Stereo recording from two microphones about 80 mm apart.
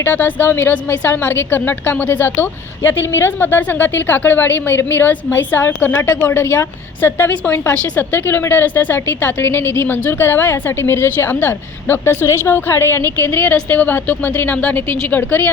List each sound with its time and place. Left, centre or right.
0.0 s a woman's voice: left